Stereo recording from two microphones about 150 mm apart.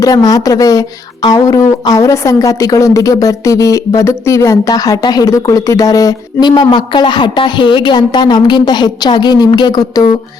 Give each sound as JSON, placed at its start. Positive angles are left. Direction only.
{"t": 0.0, "sound": "speech", "side_deg": 25}